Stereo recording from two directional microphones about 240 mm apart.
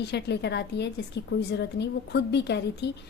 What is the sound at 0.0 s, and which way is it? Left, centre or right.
A woman's voice, left.